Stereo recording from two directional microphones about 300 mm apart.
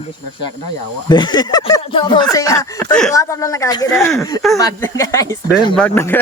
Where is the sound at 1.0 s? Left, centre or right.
Centre.